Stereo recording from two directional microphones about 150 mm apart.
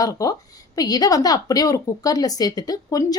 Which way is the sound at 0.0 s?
20° left (ahead or behind).